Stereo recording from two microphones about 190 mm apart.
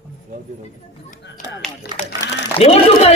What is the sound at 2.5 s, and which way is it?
Speech, 30° left (ahead or behind).